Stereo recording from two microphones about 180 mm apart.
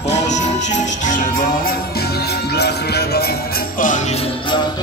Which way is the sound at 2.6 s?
65° left (ahead or behind).